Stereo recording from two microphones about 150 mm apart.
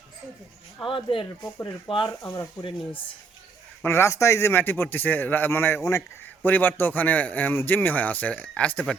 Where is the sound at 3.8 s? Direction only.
15° left (ahead or behind).